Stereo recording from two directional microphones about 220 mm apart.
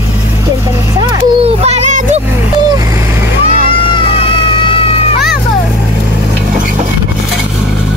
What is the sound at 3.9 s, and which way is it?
Cat, 25° left (ahead or behind).